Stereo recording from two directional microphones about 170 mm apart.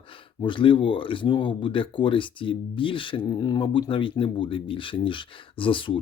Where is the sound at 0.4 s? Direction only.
30° left (ahead or behind).